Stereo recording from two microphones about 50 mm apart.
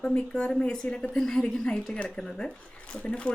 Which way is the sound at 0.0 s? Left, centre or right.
Left.